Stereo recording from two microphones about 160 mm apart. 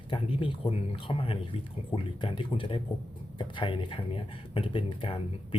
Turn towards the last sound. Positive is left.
turn(degrees=30)  # may be behind; listen again after turning